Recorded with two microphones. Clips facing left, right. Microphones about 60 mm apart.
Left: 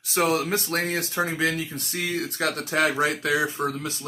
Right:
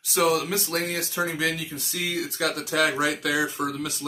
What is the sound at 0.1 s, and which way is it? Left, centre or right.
Speech, left.